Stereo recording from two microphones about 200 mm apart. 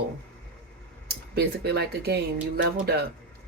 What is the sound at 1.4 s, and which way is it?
Speech, 55° right (ahead or behind).